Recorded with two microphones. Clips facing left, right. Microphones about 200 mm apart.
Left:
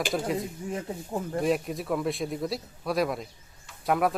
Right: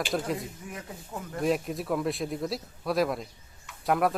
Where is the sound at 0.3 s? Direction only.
30° left (ahead or behind).